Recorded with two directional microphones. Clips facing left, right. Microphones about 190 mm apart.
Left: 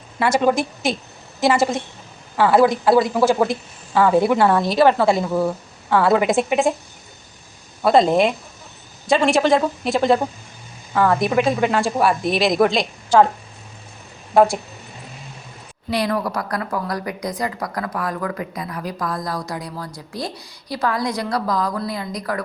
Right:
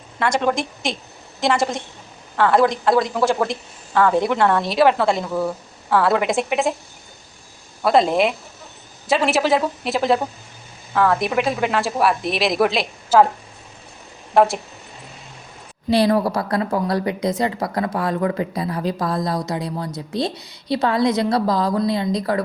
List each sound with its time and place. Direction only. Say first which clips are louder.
0.2 s speech: left 3 dB; 5° left (ahead or behind)
7.8 s speech: left 2 dB; centre (ahead or behind)
14.3 s speech: left 1 dB; centre (ahead or behind)
15.9 s a woman's voice: right 5 dB; 30° right (ahead or behind)